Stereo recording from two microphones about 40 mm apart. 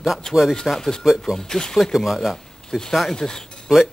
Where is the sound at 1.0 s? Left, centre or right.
Centre.